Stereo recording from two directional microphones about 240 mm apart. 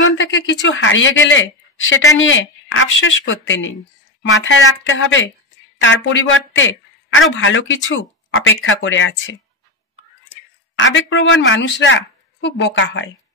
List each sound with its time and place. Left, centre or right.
0.0 s speech: left
10.8 s speech: left